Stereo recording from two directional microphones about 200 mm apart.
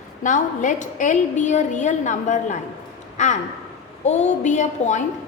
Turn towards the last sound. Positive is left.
turn(degrees=40)  # may be behind; listen again after turning